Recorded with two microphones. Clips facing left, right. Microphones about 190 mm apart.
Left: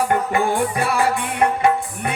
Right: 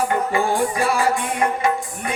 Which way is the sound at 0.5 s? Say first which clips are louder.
Even; 60° left (ahead or behind).